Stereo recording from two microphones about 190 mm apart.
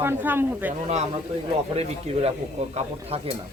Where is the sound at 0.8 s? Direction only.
35° right (ahead or behind).